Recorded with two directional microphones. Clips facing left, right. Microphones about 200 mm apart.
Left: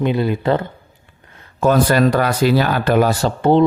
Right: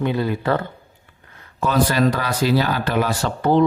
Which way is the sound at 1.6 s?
50° left (ahead or behind).